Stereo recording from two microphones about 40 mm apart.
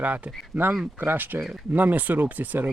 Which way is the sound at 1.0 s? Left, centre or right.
Right.